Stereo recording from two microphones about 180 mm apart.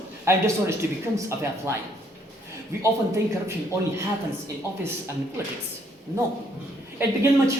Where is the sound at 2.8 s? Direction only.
15° right (ahead or behind).